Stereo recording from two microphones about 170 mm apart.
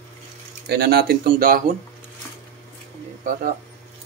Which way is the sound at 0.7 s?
70° right (ahead or behind).